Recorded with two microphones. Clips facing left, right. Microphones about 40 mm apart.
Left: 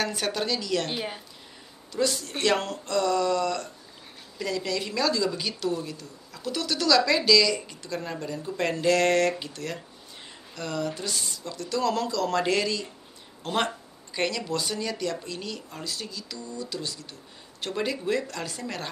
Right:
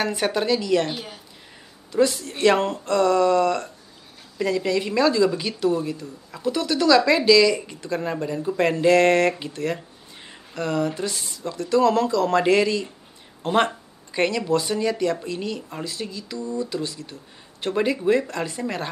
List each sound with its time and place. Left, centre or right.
0.0 s a woman's voice: centre
1.9 s a woman's voice: right
13.7 s a sound: right
14.5 s a woman's voice: centre